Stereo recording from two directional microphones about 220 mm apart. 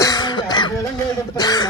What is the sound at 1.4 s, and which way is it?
Speech, 20° left (ahead or behind).